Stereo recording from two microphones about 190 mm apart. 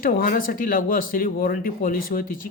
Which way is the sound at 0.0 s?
50° left (ahead or behind).